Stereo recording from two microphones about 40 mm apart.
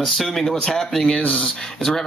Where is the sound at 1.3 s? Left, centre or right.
Left.